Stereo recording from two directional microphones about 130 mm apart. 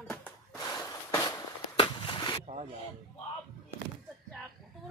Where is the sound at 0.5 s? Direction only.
30° left (ahead or behind).